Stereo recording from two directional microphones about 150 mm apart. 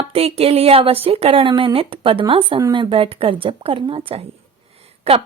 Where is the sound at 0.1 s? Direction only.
40° right (ahead or behind).